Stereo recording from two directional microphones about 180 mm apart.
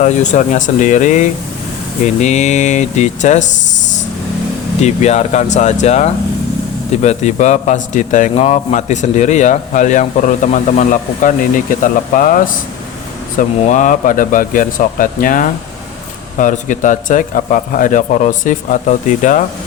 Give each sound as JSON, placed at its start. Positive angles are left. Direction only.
{"t": 0.0, "sound": "a man's voice", "side_deg": 40}
{"t": 13.6, "sound": "a man's voice", "side_deg": 45}